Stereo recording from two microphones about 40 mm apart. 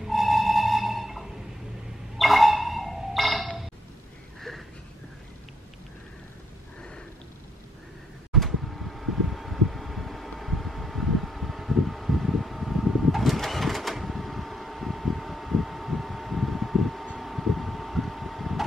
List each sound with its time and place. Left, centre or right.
0.0 s music: centre
2.1 s a sound: centre
8.3 s mechanical fan: centre
17.2 s vehicle: centre